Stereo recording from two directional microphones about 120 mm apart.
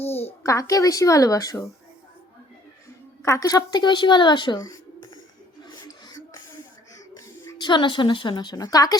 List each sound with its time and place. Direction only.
0.4 s a woman's voice: 25° left (ahead or behind)
3.2 s speech: 25° left (ahead or behind)
5.6 s a sound: 35° left (ahead or behind)
7.6 s a woman's voice: 40° left (ahead or behind)